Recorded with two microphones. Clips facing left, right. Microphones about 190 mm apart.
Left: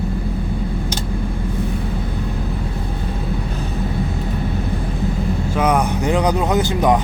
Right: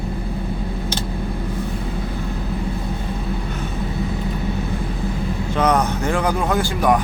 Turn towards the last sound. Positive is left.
turn(degrees=20)  # may be behind; listen again after turning